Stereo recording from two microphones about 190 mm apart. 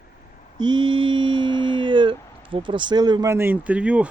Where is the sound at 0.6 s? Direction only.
25° right (ahead or behind).